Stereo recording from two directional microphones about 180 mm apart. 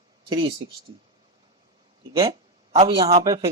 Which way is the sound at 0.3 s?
30° right (ahead or behind).